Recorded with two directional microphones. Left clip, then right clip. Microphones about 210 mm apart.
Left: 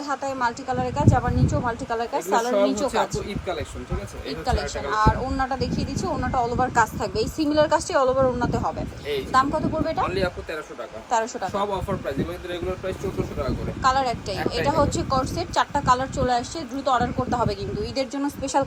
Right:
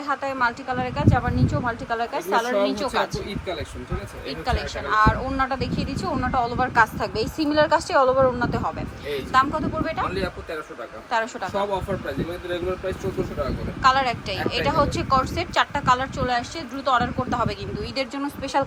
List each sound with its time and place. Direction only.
0.1 s speech: 15° left (ahead or behind)
3.2 s speech: centre (ahead or behind)
4.3 s speech: 15° left (ahead or behind)
10.0 s speech: centre (ahead or behind)
11.1 s speech: 15° left (ahead or behind)
13.8 s speech: 15° left (ahead or behind)